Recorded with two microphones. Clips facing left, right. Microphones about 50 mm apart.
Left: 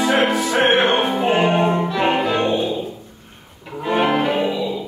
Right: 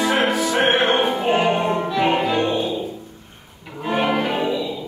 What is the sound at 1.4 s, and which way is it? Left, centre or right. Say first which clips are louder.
Music: left 2 dB; left.